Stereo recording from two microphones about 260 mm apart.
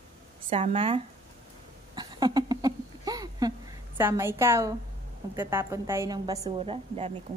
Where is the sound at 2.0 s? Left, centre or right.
Centre.